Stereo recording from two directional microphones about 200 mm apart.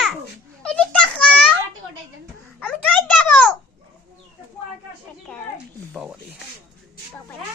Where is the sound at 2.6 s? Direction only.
5° left (ahead or behind).